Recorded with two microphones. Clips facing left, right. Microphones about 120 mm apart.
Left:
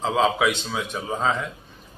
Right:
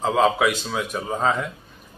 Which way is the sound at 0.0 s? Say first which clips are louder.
Right 2 dB; centre (ahead or behind).